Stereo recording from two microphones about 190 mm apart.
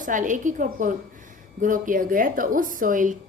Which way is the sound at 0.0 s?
45° right (ahead or behind).